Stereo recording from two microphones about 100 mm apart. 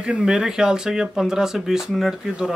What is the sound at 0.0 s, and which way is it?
Speech, 5° right (ahead or behind).